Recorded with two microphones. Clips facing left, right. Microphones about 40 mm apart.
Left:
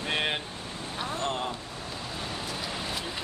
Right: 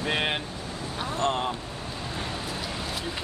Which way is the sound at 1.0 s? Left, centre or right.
Right.